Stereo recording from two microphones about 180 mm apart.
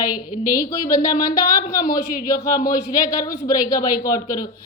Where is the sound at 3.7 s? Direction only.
50° left (ahead or behind).